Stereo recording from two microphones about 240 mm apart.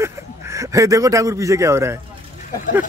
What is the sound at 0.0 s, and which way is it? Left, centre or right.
Speech, centre.